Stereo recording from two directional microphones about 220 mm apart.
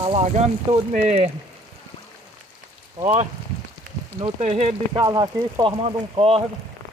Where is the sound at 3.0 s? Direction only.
30° right (ahead or behind).